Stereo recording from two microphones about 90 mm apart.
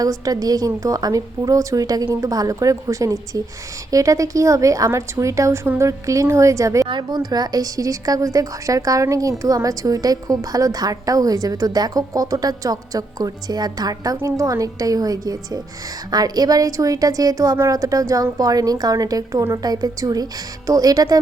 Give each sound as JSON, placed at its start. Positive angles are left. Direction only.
{"t": 0.0, "sound": "a woman's voice", "side_deg": -45}
{"t": 6.8, "sound": "a woman's voice", "side_deg": -55}